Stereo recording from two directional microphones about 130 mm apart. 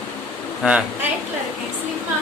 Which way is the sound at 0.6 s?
5° right (ahead or behind).